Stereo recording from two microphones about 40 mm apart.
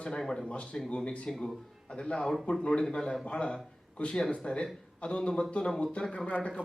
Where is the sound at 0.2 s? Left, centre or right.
Centre.